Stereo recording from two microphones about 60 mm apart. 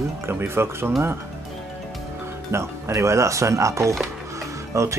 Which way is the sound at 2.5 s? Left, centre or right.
Right.